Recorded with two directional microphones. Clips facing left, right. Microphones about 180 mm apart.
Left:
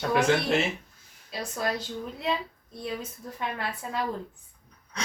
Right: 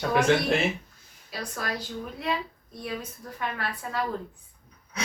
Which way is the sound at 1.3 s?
25° left (ahead or behind).